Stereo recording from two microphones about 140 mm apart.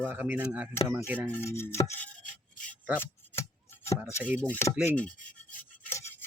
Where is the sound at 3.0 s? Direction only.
15° left (ahead or behind).